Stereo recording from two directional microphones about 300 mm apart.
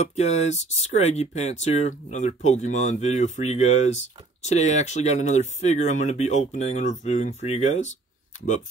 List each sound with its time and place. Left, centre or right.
0.0 s speech: left